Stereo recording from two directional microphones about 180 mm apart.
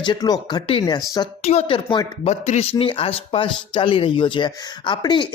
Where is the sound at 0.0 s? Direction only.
25° left (ahead or behind).